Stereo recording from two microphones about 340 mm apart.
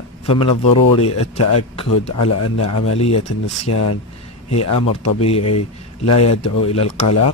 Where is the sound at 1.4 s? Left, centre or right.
Left.